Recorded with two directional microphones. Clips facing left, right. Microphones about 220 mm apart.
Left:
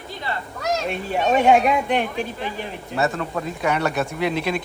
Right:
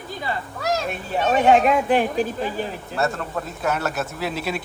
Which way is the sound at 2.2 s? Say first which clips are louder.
Right 4 dB; 35° right (ahead or behind).